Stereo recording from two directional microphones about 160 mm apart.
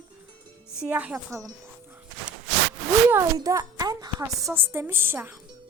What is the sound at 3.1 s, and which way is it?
A woman's voice, 20° right (ahead or behind).